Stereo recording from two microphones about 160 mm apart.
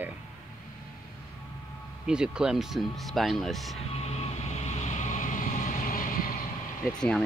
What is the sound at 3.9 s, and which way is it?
Vehicle, 40° left (ahead or behind).